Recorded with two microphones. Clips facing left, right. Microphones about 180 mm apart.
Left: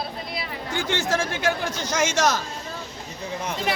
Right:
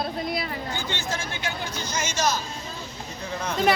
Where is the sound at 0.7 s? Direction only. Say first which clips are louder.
Left 6 dB; 90° left.